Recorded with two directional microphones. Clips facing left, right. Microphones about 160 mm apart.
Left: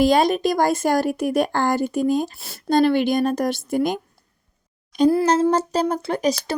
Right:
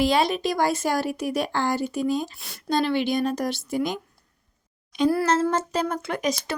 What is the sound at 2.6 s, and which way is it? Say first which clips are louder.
Speech: left 6 dB; 50° left (ahead or behind).